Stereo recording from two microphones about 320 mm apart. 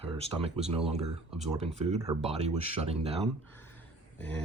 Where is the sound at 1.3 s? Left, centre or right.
Centre.